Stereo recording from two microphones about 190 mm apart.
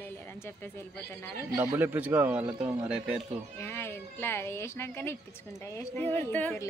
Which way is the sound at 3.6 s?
15° left (ahead or behind).